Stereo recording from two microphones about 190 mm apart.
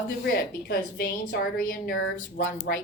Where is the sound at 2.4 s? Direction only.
70° left (ahead or behind).